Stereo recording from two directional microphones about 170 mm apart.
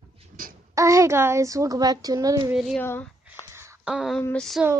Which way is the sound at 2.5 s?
5° right (ahead or behind).